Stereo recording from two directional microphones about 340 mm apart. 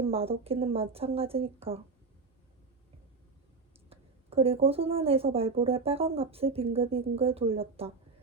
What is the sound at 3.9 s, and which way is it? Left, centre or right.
A woman's voice, centre.